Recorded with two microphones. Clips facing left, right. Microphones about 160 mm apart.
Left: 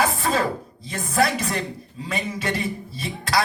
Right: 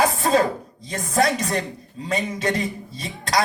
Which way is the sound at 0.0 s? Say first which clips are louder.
Right 3 dB; 35° right (ahead or behind).